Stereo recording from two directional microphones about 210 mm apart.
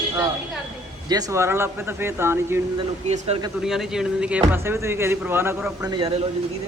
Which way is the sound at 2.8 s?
35° right (ahead or behind).